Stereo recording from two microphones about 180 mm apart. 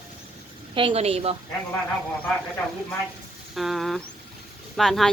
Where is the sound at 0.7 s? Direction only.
30° right (ahead or behind).